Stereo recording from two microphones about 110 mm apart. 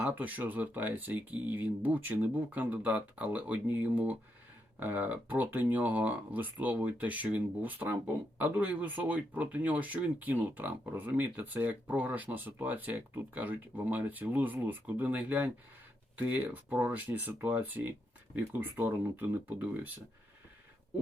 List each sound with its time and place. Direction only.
0.0 s speech: 15° right (ahead or behind)